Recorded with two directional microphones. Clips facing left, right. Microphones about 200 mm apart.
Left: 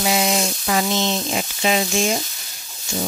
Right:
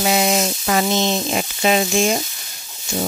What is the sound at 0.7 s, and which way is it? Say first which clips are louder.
Speech: right 2 dB; 50° right (ahead or behind).